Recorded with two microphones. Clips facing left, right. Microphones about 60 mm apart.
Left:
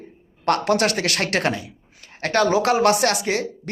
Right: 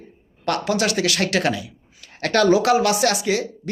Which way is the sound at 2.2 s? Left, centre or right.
Left.